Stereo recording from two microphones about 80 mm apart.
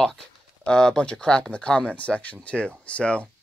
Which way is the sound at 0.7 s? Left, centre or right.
Centre.